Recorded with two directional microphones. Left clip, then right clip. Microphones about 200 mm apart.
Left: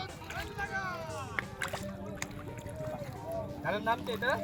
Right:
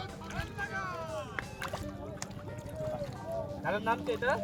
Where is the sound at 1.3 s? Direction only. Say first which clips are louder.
Left 2 dB; 25° left (ahead or behind).